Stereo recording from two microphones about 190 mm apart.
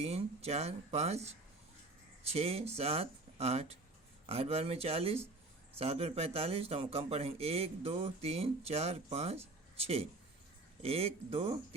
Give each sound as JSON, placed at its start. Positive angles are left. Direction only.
{"t": 0.0, "sound": "speech", "side_deg": -35}